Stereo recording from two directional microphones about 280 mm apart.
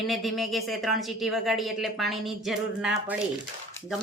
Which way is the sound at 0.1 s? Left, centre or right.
Centre.